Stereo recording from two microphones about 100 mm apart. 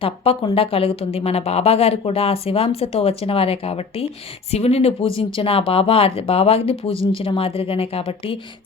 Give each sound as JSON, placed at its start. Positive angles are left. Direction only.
{"t": 0.5, "sound": "speech", "side_deg": 70}
{"t": 4.5, "sound": "speech", "side_deg": 90}